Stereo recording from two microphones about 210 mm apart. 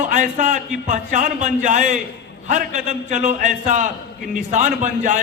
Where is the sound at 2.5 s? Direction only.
35° right (ahead or behind).